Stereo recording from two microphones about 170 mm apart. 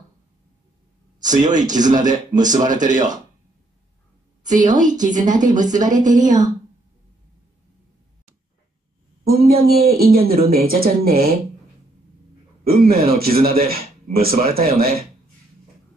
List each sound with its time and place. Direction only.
1.2 s a woman's voice: 45° right (ahead or behind)
4.4 s a woman's voice: 50° right (ahead or behind)
9.3 s speech: 60° right (ahead or behind)
12.6 s speech: 60° right (ahead or behind)